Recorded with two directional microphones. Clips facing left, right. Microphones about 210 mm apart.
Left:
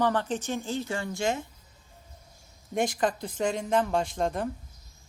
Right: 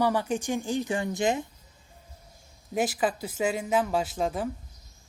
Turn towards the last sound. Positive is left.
turn(degrees=-5)  # may be behind; listen again after turning